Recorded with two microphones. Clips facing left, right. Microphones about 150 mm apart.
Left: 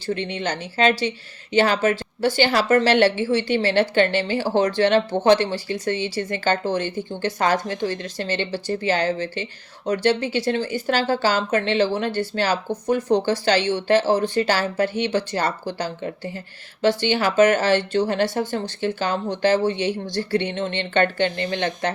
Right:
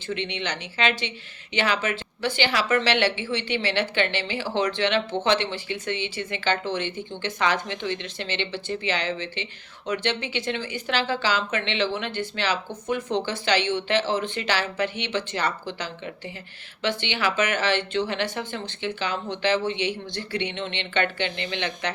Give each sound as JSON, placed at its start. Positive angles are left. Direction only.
{"t": 0.1, "sound": "a woman's voice", "side_deg": 45}